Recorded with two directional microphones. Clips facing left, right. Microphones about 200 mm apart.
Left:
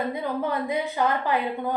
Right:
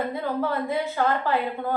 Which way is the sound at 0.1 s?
15° left (ahead or behind).